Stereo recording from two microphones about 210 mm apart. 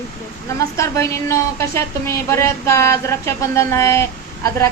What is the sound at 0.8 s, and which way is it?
Speech, 15° left (ahead or behind).